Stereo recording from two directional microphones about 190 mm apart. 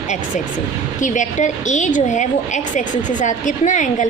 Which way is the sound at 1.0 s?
40° left (ahead or behind).